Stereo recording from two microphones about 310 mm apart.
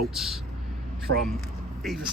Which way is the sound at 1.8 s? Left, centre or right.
Centre.